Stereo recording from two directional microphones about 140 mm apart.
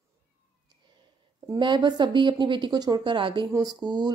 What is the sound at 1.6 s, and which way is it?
Speech, 35° right (ahead or behind).